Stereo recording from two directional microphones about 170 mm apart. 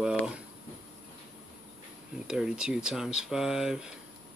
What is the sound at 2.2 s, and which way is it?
Speech, 5° right (ahead or behind).